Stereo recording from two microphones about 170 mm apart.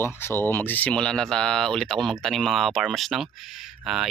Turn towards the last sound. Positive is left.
turn(degrees=0)  # may be behind; listen again after turning